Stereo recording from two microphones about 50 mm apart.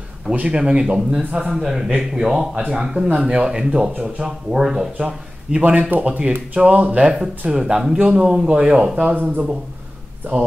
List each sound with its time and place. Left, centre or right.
0.3 s a man's voice: right
2.5 s a man's voice: right
5.6 s speech: right
7.5 s a man's voice: centre
8.0 s speech: right